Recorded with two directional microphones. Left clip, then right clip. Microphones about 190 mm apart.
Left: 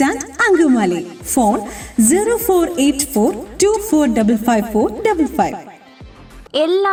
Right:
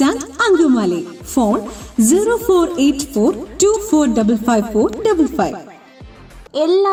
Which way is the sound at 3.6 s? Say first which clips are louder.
Even; 10° left (ahead or behind).